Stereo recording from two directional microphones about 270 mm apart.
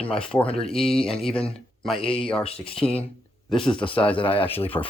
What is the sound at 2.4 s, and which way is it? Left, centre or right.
Speech, left.